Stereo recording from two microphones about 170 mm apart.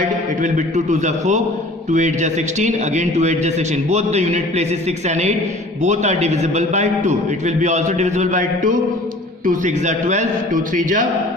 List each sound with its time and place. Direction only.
0.4 s a man's voice: 45° right (ahead or behind)